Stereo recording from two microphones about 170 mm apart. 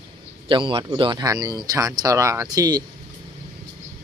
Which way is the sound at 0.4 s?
30° right (ahead or behind).